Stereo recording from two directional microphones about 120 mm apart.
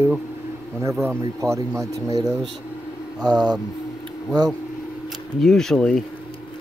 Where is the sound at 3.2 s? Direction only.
35° right (ahead or behind).